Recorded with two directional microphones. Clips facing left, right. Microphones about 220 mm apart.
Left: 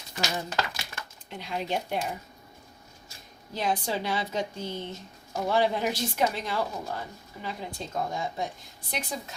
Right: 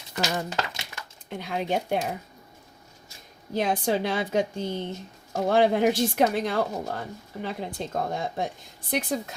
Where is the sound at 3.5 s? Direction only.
50° right (ahead or behind).